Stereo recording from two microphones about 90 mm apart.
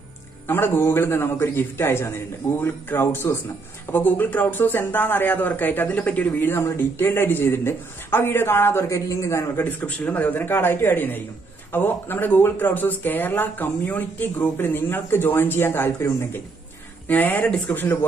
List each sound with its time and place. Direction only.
0.5 s speech: 25° left (ahead or behind)
9.7 s speech: 20° left (ahead or behind)